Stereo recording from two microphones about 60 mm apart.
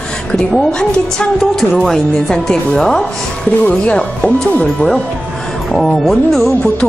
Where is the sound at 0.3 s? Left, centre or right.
Left.